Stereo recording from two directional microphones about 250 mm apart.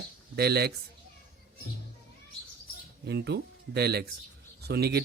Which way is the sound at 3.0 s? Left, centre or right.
Right.